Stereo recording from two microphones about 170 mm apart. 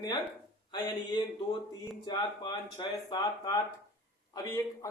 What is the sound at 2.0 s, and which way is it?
Speech, 25° left (ahead or behind).